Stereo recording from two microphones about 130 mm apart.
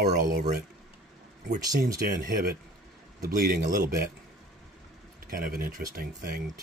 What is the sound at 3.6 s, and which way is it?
Speech, 90° right.